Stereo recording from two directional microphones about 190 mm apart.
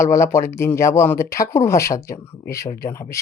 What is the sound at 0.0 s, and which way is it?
Speech, 15° left (ahead or behind).